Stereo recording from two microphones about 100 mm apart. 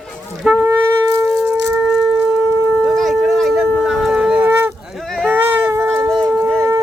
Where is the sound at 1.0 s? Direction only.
30° right (ahead or behind).